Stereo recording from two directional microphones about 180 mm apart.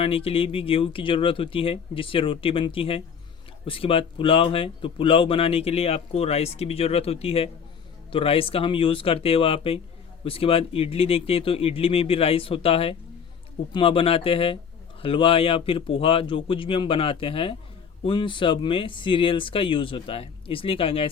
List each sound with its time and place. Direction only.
0.0 s speech: 30° left (ahead or behind)